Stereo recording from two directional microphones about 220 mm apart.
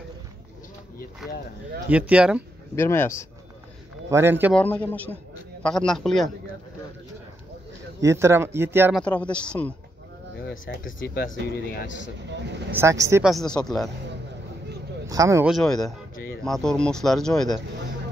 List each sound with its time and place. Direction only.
1.9 s speech: 5° right (ahead or behind)
2.7 s speech: 10° left (ahead or behind)
4.1 s speech: 10° right (ahead or behind)
4.6 s speech: 5° left (ahead or behind)
8.0 s speech: 15° right (ahead or behind)
9.0 s speech: 5° left (ahead or behind)
10.9 s speech: 40° left (ahead or behind)
12.7 s speech: 15° right (ahead or behind)
13.2 s speech: centre (ahead or behind)
15.0 s speech: 15° right (ahead or behind)
15.5 s speech: centre (ahead or behind)